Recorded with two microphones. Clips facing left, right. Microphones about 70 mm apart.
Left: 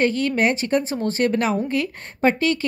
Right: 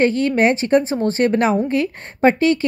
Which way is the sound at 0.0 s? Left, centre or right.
Right.